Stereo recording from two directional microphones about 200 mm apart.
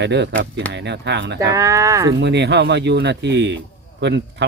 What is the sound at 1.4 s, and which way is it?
Speech, 15° right (ahead or behind).